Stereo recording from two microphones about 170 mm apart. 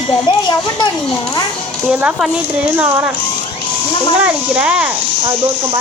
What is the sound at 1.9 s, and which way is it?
Speech, 10° right (ahead or behind).